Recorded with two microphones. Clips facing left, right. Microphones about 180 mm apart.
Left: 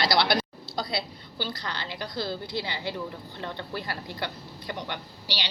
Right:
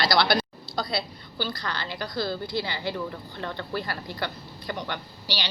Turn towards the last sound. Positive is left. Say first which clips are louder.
# right 2 dB
turn(degrees=15)  # may be behind; listen again after turning